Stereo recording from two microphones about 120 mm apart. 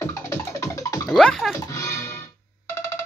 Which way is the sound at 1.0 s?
5° left (ahead or behind).